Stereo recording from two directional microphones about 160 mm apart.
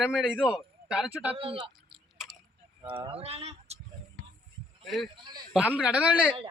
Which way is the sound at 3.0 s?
35° right (ahead or behind).